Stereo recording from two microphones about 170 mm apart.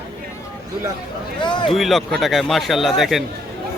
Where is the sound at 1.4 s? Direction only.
25° left (ahead or behind).